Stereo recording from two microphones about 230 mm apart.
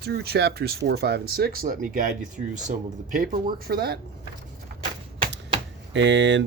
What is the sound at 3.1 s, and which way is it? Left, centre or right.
Speech, right.